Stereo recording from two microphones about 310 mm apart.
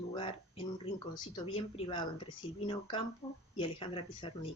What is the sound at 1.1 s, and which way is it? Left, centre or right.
Speech, centre.